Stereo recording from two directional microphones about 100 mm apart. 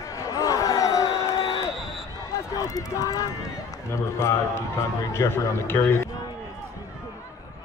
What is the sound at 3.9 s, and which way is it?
A man's voice, 30° left (ahead or behind).